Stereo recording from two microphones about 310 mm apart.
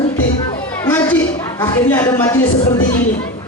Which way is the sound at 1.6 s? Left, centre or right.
Centre.